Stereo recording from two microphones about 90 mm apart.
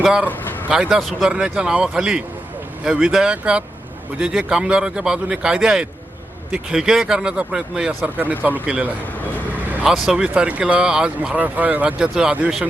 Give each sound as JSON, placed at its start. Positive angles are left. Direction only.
{"t": 0.0, "sound": "speech", "side_deg": -5}
{"t": 10.1, "sound": "speech", "side_deg": -10}